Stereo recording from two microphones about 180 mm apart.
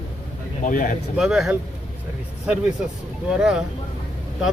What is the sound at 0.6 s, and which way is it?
Speech, 45° left (ahead or behind).